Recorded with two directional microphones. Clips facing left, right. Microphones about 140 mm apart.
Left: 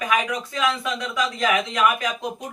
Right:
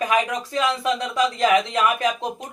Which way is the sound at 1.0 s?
30° right (ahead or behind).